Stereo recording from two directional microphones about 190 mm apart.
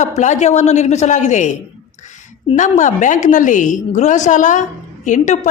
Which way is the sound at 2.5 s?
40° left (ahead or behind).